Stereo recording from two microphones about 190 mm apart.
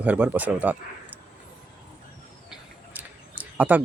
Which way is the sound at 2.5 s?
10° right (ahead or behind).